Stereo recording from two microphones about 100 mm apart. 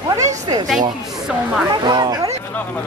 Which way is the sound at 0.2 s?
40° right (ahead or behind).